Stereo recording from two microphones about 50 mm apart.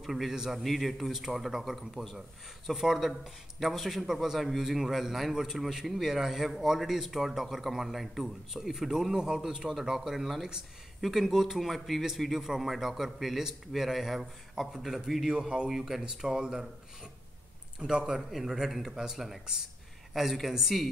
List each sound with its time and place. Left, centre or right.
0.0 s a man's voice: centre
15.3 s speech: centre
15.7 s speech: centre
17.7 s speech: centre